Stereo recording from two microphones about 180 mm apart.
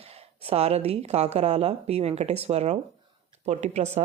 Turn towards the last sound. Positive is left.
turn(degrees=-40)  # may be behind; listen again after turning